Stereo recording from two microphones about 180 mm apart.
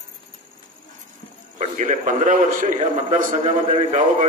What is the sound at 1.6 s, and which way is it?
A man's voice, 40° right (ahead or behind).